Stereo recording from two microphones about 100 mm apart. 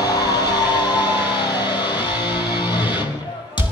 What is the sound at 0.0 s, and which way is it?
Music, 40° left (ahead or behind).